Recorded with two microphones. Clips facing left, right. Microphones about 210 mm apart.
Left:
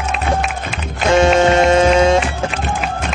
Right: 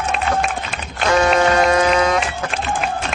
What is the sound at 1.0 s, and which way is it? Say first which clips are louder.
Printer: left 4 dB; 25° left (ahead or behind).